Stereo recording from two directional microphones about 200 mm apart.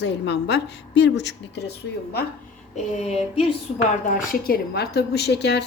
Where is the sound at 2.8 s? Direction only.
35° left (ahead or behind).